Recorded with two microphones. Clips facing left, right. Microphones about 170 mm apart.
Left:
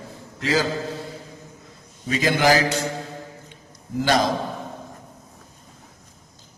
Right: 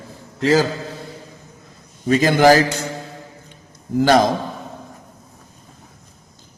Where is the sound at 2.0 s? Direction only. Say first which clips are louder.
Right 6 dB; 50° right (ahead or behind).